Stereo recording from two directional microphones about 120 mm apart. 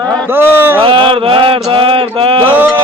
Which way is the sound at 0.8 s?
45° right (ahead or behind).